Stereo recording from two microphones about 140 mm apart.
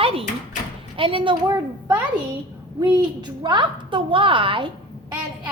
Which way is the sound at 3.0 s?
35° right (ahead or behind).